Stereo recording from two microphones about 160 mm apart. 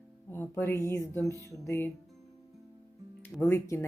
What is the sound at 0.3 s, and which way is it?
A woman's voice, 15° left (ahead or behind).